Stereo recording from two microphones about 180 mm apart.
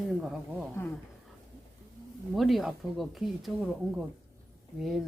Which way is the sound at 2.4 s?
Centre (ahead or behind).